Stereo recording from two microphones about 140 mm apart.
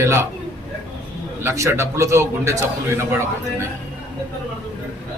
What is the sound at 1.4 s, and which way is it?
A man's voice, 20° right (ahead or behind).